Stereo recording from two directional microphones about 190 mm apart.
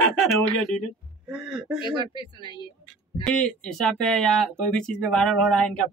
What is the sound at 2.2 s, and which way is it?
Speech, 25° left (ahead or behind).